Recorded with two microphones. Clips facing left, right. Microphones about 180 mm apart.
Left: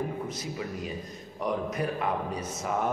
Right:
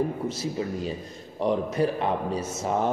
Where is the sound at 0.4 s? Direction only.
30° right (ahead or behind).